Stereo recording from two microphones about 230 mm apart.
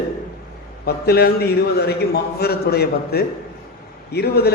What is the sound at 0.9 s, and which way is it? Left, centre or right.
A man's voice, left.